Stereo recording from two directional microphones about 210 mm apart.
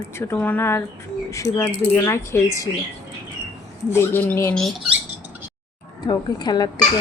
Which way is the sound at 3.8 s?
10° left (ahead or behind).